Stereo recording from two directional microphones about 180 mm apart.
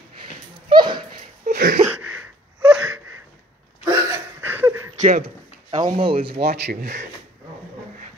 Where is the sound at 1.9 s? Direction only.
10° right (ahead or behind).